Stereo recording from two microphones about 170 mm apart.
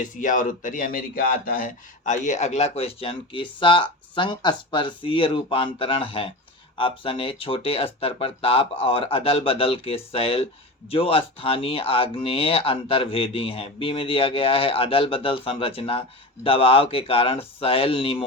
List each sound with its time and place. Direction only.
0.0 s speech: 50° left (ahead or behind); by 18.2 s 35° left (ahead or behind)